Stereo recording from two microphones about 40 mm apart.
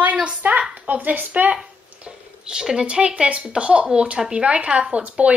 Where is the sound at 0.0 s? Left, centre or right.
Right.